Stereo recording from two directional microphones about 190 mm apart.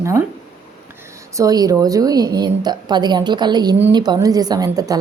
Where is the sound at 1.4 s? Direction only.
20° right (ahead or behind).